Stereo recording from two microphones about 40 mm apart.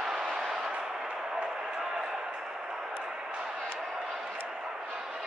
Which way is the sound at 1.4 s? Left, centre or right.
Right.